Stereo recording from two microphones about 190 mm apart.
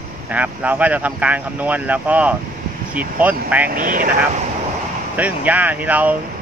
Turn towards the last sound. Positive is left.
turn(degrees=-10)  # may be behind; listen again after turning